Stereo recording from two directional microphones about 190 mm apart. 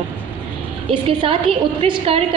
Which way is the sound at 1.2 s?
30° right (ahead or behind).